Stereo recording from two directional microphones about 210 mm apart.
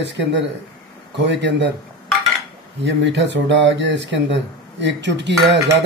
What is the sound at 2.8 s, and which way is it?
Speech, 55° right (ahead or behind).